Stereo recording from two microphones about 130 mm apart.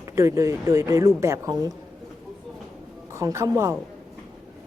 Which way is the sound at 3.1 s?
25° right (ahead or behind).